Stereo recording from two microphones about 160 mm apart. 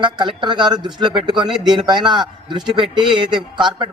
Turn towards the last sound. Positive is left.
turn(degrees=-30)  # may be behind; listen again after turning